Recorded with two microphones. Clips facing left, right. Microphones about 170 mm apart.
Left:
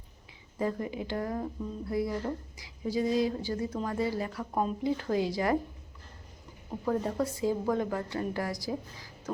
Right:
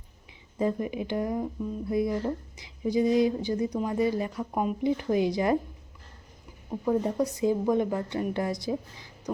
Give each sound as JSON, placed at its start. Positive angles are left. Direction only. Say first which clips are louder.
{"t": 0.6, "sound": "a woman's voice", "louder": "right 4 dB", "side_deg": -20}
{"t": 6.7, "sound": "a woman's voice", "louder": "right 4 dB", "side_deg": -15}